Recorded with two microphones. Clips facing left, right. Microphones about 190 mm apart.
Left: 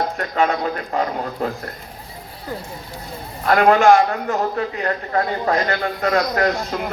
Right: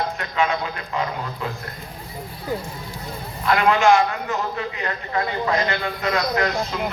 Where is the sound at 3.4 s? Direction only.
45° left (ahead or behind).